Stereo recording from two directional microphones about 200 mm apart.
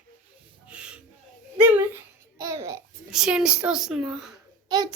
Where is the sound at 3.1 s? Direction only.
5° right (ahead or behind).